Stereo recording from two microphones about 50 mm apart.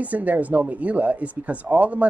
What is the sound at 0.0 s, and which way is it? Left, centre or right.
Speech, right.